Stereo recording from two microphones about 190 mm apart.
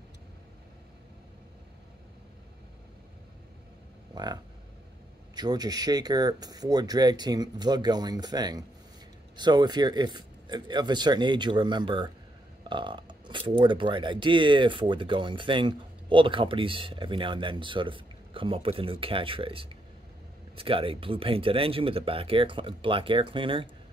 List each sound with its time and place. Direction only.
4.1 s cattle: 20° right (ahead or behind)
5.3 s speech: 20° right (ahead or behind)
12.6 s a sound: 25° right (ahead or behind)
13.6 s speech: 25° right (ahead or behind)